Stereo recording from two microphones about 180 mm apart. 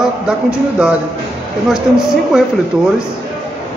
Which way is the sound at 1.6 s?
Centre (ahead or behind).